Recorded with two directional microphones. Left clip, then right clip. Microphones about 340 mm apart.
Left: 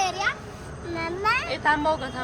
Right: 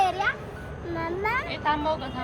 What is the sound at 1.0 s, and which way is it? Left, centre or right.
Vehicle, centre.